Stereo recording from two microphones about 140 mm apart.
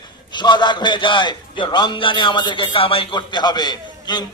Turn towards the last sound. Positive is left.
turn(degrees=30)  # may be behind; listen again after turning